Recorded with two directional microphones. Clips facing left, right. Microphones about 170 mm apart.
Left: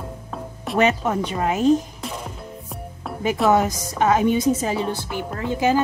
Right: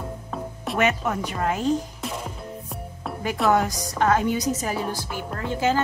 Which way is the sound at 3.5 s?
25° left (ahead or behind).